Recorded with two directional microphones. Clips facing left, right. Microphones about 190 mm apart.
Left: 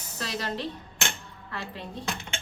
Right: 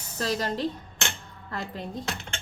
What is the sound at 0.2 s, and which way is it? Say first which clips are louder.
Speech: right 5 dB; 40° right (ahead or behind).